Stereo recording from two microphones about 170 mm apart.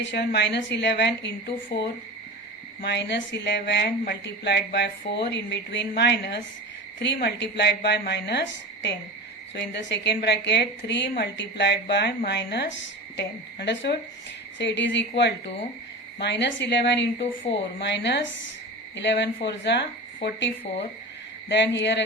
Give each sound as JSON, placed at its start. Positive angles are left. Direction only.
{"t": 0.0, "sound": "a woman's voice", "side_deg": 85}
{"t": 1.7, "sound": "speech", "side_deg": 30}
{"t": 2.8, "sound": "a woman's voice", "side_deg": 90}
{"t": 14.6, "sound": "a woman's voice", "side_deg": 90}